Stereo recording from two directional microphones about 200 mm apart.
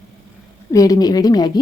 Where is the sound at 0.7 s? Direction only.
15° left (ahead or behind).